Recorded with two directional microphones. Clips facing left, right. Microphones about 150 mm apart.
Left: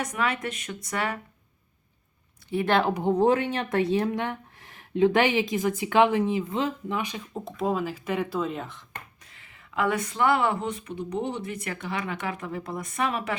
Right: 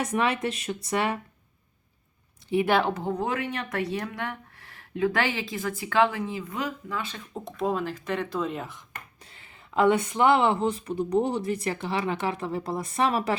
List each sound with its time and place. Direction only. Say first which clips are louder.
0.0 s speech: right 3 dB; 25° right (ahead or behind)
2.5 s speech: right 1 dB; 10° right (ahead or behind)
2.9 s speech: left 5 dB; 20° left (ahead or behind)
3.2 s speech: left 7 dB; 30° left (ahead or behind)
7.3 s speech: even; centre (ahead or behind)
9.3 s speech: right 5 dB; 30° right (ahead or behind)